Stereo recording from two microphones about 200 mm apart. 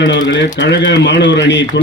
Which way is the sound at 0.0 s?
60° left (ahead or behind).